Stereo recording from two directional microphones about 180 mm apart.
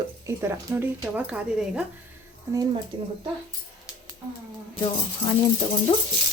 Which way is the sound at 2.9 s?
30° right (ahead or behind).